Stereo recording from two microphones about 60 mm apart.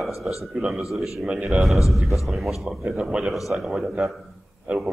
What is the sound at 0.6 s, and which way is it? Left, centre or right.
A man's voice, centre.